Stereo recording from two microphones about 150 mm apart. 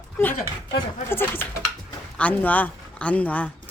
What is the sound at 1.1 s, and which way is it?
A woman's voice, 15° left (ahead or behind).